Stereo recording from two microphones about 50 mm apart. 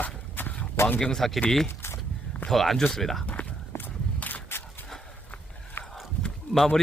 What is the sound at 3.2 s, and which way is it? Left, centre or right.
Walk, left.